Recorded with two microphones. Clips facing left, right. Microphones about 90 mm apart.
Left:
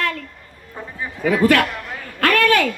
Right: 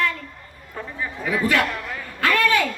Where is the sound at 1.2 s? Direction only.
65° left (ahead or behind).